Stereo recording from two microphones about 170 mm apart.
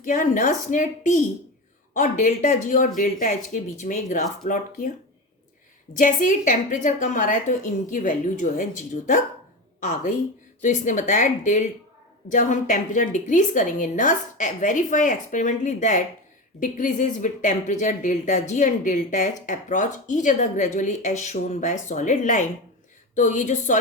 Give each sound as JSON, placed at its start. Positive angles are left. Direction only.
{"t": 0.0, "sound": "speech", "side_deg": 50}
{"t": 5.9, "sound": "speech", "side_deg": 50}